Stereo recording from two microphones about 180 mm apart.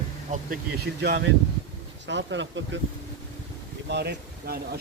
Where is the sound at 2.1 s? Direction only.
85° right.